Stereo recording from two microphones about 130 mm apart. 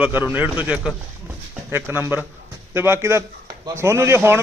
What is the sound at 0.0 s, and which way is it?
A man's voice, 15° right (ahead or behind).